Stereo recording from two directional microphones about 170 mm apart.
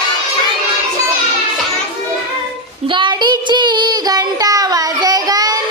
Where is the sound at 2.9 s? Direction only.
25° right (ahead or behind).